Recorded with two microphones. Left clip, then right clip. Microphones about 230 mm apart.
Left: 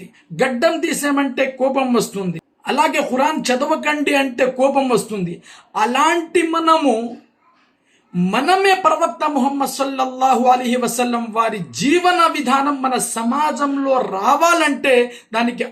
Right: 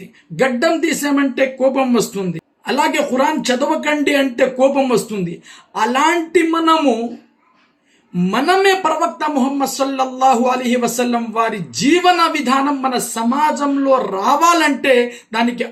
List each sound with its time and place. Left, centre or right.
0.3 s speech: centre
8.3 s speech: centre